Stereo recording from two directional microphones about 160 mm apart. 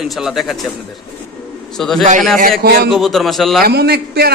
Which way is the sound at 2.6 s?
70° right (ahead or behind).